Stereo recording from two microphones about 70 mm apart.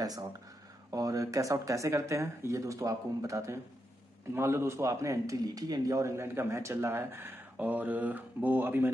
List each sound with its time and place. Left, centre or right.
0.0 s a man's voice: right
4.3 s a man's voice: right
7.5 s speech: right